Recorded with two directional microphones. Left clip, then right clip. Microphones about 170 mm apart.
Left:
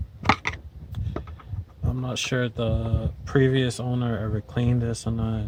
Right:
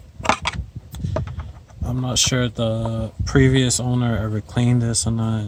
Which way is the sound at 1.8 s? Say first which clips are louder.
Right 8 dB; 20° right (ahead or behind).